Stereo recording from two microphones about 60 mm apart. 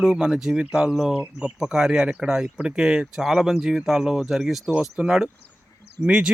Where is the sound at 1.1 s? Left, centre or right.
Centre.